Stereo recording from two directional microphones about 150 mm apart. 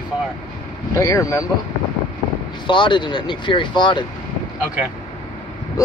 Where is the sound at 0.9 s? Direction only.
20° left (ahead or behind).